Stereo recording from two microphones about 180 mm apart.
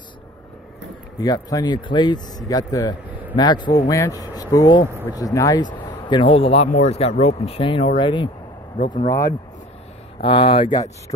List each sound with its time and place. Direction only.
1.2 s speech: 20° left (ahead or behind)